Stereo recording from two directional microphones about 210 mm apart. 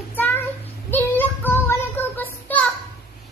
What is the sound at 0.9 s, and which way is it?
Child singing, 10° left (ahead or behind).